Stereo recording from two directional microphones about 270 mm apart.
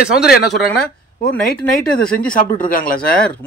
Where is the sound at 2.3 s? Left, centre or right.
Left.